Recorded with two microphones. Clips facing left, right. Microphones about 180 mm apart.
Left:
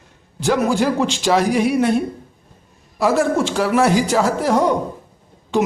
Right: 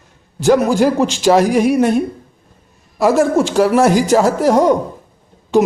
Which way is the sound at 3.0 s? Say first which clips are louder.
Right 4 dB; 45° right (ahead or behind).